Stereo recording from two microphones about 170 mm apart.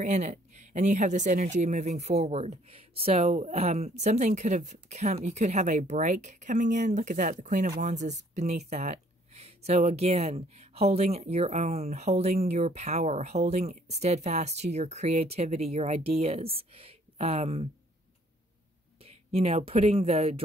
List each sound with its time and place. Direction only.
0.0 s speech: 45° right (ahead or behind)
19.0 s speech: 35° right (ahead or behind)